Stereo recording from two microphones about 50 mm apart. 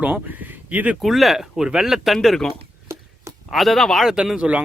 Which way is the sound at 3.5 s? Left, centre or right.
Centre.